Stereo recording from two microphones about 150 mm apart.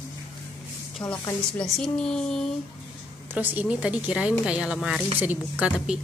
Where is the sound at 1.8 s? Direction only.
5° left (ahead or behind).